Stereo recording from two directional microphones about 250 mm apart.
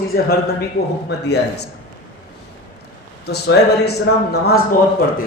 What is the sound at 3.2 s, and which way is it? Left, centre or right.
Speech, left.